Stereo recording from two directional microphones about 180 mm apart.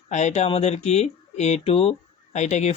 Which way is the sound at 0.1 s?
40° left (ahead or behind).